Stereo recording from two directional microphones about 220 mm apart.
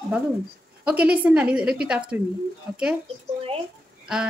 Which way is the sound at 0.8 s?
5° right (ahead or behind).